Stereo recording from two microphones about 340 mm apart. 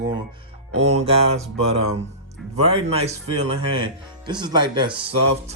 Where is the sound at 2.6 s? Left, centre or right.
Centre.